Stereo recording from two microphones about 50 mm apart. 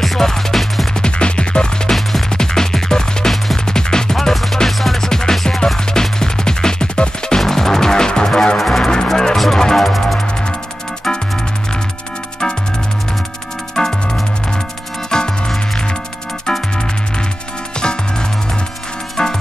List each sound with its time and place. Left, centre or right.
0.0 s music: centre
0.9 s music: centre
1.9 s music: centre
13.7 s music: centre